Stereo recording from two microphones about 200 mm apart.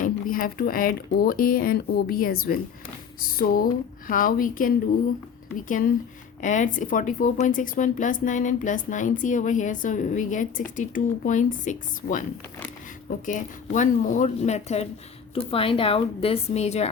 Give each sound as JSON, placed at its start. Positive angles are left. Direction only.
{"t": 0.0, "sound": "a woman's voice", "side_deg": 45}